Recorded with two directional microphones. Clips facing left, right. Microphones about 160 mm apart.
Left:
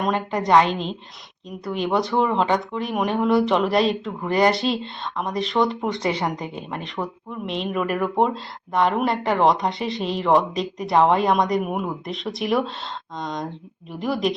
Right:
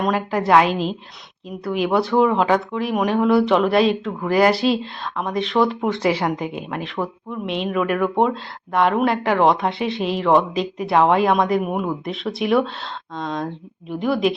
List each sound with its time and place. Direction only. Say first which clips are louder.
0.0 s speech: right 2 dB; 5° right (ahead or behind)